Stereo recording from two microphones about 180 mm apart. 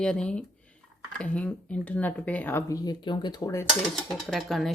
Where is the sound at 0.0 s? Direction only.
5° left (ahead or behind).